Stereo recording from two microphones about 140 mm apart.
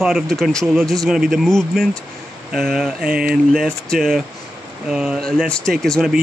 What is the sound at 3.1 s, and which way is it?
Speech, 90° right.